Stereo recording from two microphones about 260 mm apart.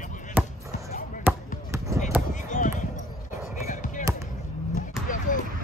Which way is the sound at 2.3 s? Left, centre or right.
Left.